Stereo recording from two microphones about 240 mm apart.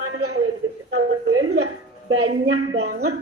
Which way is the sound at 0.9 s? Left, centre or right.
Right.